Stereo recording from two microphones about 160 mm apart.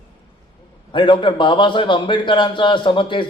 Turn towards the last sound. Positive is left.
turn(degrees=30)  # may be behind; listen again after turning